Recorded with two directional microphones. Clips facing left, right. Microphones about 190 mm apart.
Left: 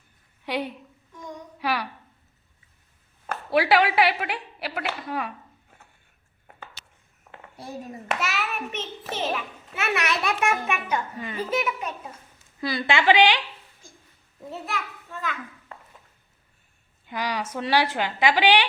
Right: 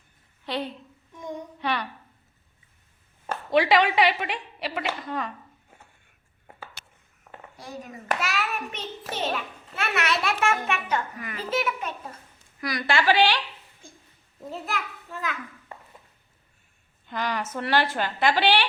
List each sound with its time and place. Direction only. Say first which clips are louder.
0.4 s a woman's voice: left 2 dB; 10° left (ahead or behind)
3.5 s a woman's voice: even; 5° left (ahead or behind)
6.8 s a sound: right 2 dB; 55° right (ahead or behind)
8.1 s a woman's voice: right 1 dB; centre (ahead or behind)
10.0 s a woman's voice: right 2 dB; 20° left (ahead or behind)
12.5 s a woman's voice: left 1 dB; 25° left (ahead or behind)
14.5 s a woman's voice: even; centre (ahead or behind)
17.1 s a woman's voice: even; 10° left (ahead or behind)